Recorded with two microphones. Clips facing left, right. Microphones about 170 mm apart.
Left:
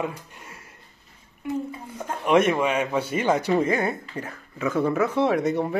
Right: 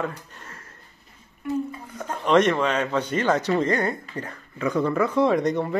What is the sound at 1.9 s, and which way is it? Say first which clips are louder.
Speech: even; 10° left (ahead or behind).